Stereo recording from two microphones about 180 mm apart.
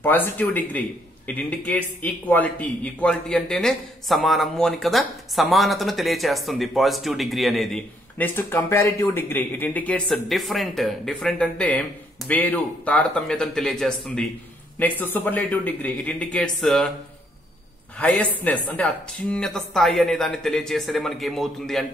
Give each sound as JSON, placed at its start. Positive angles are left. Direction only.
{"t": 0.0, "sound": "a man's voice", "side_deg": 10}
{"t": 17.9, "sound": "a man's voice", "side_deg": 10}